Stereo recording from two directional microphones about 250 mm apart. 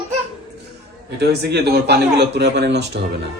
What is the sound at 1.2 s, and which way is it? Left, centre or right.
Speech, right.